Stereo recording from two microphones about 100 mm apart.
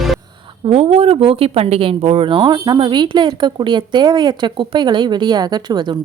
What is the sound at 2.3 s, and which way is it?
Speech, 45° right (ahead or behind).